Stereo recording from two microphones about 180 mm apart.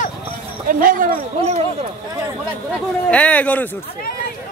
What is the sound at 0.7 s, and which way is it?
Speech, 50° right (ahead or behind).